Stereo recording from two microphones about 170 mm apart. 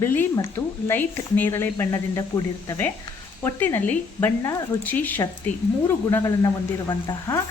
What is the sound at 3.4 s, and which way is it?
A woman's voice, 10° left (ahead or behind).